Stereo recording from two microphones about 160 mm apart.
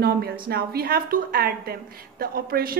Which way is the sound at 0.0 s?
75° right (ahead or behind).